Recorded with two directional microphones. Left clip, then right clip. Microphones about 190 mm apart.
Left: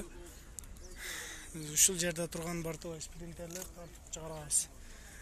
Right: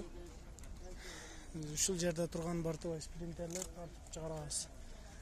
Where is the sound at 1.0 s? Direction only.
10° right (ahead or behind).